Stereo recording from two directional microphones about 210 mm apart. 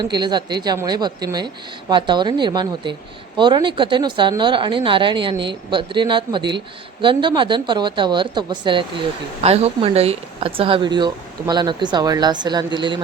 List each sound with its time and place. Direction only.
0.0 s speech: 20° right (ahead or behind)